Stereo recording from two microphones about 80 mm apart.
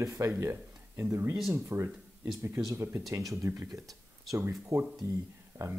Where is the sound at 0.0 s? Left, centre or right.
Right.